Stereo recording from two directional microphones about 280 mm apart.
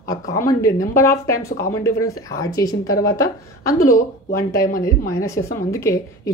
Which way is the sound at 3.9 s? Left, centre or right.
Left.